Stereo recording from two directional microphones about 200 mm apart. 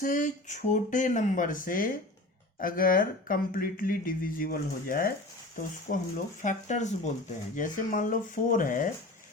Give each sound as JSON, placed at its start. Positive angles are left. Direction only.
{"t": 0.0, "sound": "speech", "side_deg": 40}